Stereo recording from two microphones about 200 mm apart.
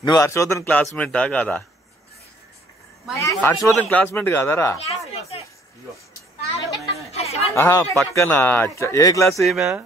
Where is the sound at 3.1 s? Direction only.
15° left (ahead or behind).